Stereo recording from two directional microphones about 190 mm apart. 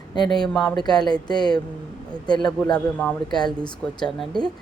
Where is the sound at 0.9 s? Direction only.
20° left (ahead or behind).